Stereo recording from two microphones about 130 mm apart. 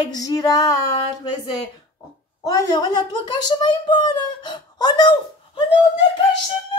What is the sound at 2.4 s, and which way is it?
Speech, 25° left (ahead or behind).